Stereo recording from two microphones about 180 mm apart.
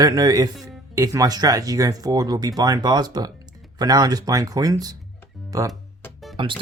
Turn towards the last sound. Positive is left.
turn(degrees=-25)  # may be behind; listen again after turning